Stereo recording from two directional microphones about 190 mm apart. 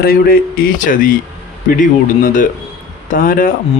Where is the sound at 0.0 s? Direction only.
50° left (ahead or behind).